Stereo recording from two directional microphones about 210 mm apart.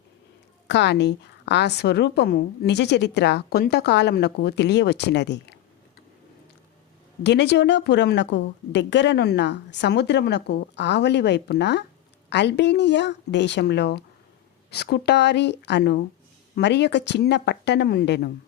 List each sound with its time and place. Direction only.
0.7 s a woman's voice: 55° left (ahead or behind)
7.3 s a woman's voice: 55° left (ahead or behind)